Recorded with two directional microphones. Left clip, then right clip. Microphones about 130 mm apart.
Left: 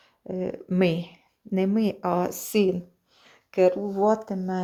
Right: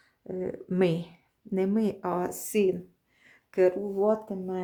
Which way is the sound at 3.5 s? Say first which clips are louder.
Left 3 dB; centre (ahead or behind).